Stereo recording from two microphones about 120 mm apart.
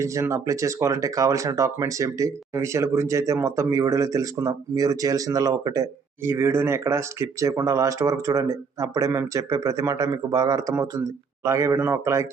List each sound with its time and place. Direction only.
0.0 s speech: 25° right (ahead or behind)
6.2 s speech: 20° right (ahead or behind)